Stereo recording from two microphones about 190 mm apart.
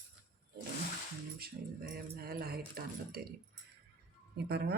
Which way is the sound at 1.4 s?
55° right (ahead or behind).